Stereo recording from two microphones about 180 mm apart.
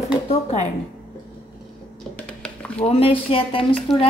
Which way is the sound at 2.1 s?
5° left (ahead or behind).